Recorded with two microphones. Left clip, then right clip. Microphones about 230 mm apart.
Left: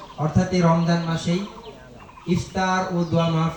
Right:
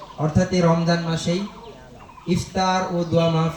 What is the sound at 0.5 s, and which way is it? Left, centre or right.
Speech, right.